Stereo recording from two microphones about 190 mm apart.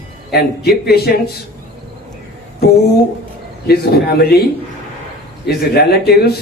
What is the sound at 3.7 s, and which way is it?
Speech, 55° left (ahead or behind).